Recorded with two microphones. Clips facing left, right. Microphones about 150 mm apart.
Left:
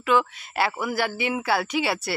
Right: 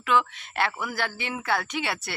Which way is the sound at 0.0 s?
5° left (ahead or behind).